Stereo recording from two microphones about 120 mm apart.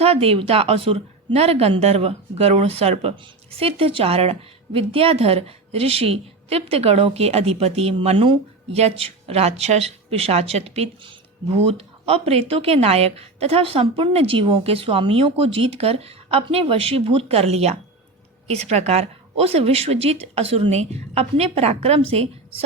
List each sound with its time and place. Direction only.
0.0 s a woman's voice: 55° right (ahead or behind)